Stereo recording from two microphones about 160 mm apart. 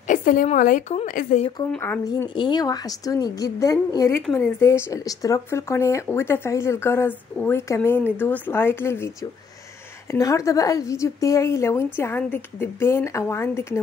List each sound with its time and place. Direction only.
0.1 s a woman's voice: 55° left (ahead or behind)
1.7 s speech: 10° left (ahead or behind)
2.0 s a woman's voice: 25° left (ahead or behind)
10.1 s a woman's voice: 20° left (ahead or behind)